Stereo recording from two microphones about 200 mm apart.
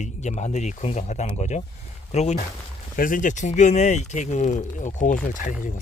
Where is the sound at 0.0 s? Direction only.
35° left (ahead or behind).